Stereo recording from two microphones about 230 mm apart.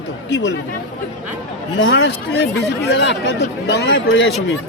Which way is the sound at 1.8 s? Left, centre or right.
Left.